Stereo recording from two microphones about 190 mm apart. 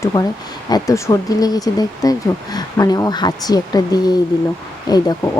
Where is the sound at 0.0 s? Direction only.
15° left (ahead or behind).